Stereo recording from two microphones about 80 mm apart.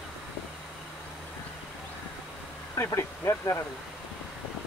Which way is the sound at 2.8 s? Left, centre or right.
Left.